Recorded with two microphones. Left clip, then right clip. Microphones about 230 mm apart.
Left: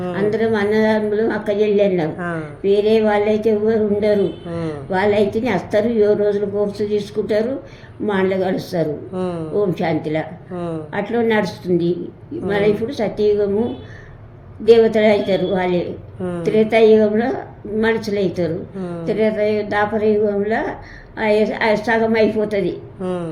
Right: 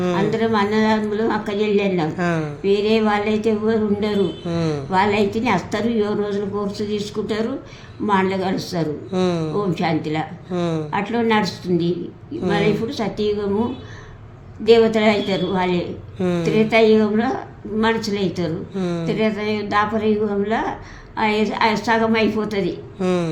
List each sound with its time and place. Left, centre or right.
0.3 s a woman's voice: centre
2.1 s speech: right
2.6 s a woman's voice: centre
9.1 s speech: right
9.7 s a woman's voice: centre
10.5 s speech: right
10.9 s a woman's voice: centre
14.6 s a woman's voice: centre
18.8 s speech: right
19.0 s a woman's voice: centre
23.0 s speech: right